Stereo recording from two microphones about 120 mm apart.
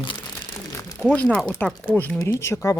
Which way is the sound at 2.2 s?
25° left (ahead or behind).